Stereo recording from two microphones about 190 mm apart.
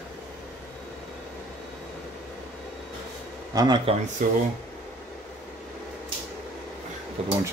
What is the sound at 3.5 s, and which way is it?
Speech, 25° right (ahead or behind).